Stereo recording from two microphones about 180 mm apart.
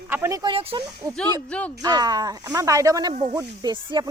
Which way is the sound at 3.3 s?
25° right (ahead or behind).